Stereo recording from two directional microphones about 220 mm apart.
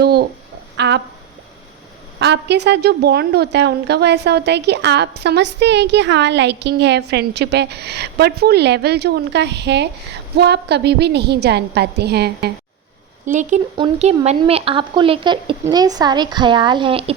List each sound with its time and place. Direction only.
0.0 s a sound: 45° right (ahead or behind)
0.8 s a woman's voice: 50° right (ahead or behind)
2.1 s a woman's voice: 50° right (ahead or behind)
13.2 s speech: 35° right (ahead or behind)
13.7 s speech: 25° right (ahead or behind)